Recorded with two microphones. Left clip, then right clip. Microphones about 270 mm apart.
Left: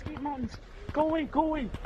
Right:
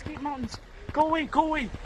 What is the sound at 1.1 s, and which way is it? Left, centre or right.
Speech, right.